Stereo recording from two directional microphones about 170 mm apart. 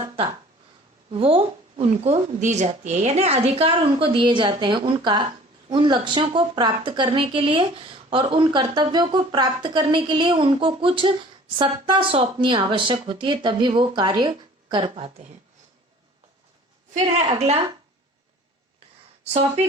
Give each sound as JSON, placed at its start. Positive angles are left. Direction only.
{"t": 1.1, "sound": "a woman's voice", "side_deg": -35}
{"t": 16.9, "sound": "a woman's voice", "side_deg": -40}